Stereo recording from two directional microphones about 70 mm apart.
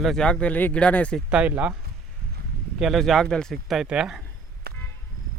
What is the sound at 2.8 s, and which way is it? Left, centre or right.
Speech, centre.